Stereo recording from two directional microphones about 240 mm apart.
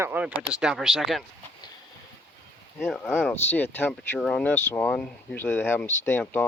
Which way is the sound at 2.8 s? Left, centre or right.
Centre.